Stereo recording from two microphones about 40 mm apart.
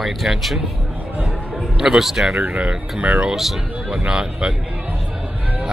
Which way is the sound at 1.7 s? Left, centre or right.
Centre.